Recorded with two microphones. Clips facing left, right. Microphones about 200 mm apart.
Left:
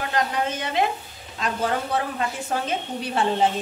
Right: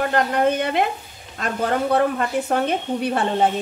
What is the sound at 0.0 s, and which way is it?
A woman's voice, 55° right (ahead or behind).